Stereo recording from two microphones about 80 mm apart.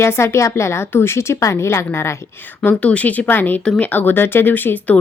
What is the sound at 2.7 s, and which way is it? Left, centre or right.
A woman's voice, centre.